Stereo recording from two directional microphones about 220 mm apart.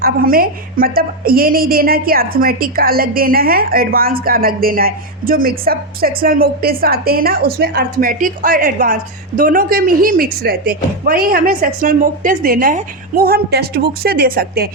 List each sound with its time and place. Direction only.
0.0 s a woman's voice: 40° right (ahead or behind)